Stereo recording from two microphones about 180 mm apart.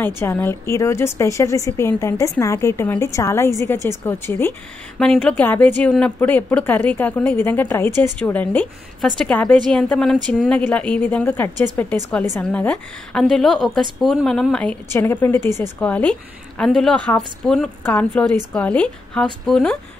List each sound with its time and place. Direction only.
0.0 s a woman's voice: 10° left (ahead or behind)